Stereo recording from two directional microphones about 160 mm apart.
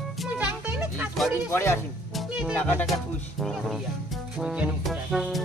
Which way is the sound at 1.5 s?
15° left (ahead or behind).